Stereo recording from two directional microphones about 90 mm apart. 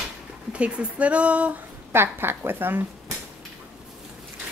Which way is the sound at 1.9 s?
25° right (ahead or behind).